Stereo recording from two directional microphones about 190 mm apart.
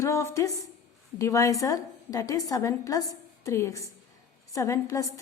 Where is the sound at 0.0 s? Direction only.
15° left (ahead or behind).